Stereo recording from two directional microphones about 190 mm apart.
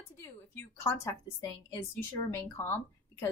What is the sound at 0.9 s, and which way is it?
A woman's voice, 15° left (ahead or behind).